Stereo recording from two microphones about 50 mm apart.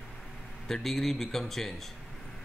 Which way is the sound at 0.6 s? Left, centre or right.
Centre.